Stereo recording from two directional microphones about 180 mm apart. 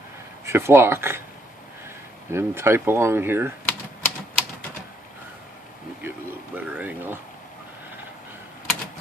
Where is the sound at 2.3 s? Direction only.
15° right (ahead or behind).